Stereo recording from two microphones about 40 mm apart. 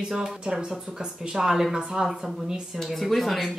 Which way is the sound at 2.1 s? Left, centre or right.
Centre.